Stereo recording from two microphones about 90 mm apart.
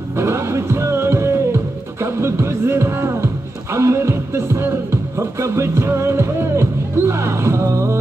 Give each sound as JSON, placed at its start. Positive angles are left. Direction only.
{"t": 0.2, "sound": "music", "side_deg": -30}